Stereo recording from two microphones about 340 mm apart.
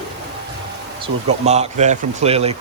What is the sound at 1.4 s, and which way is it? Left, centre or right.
A man's voice, centre.